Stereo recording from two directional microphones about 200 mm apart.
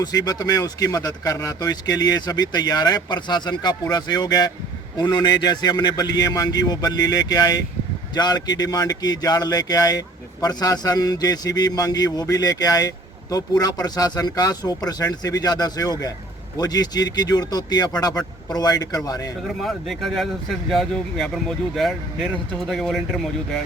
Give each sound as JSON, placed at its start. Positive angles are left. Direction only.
{"t": 0.0, "sound": "speech", "side_deg": 20}
{"t": 19.6, "sound": "speech", "side_deg": 0}